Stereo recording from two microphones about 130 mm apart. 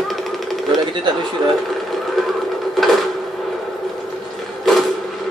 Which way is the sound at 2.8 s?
Centre (ahead or behind).